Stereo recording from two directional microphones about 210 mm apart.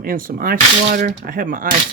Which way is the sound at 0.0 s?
40° right (ahead or behind).